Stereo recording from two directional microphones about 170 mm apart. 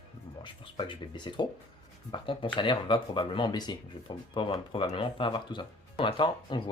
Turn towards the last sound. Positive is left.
turn(degrees=25)  # may be behind; listen again after turning